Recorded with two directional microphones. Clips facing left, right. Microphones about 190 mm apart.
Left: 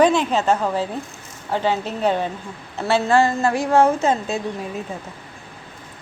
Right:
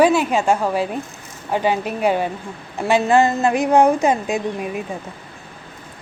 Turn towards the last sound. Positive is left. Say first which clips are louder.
# right 3 dB
turn(degrees=-15)  # may be behind; listen again after turning